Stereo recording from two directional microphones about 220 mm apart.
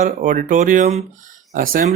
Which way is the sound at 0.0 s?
35° right (ahead or behind).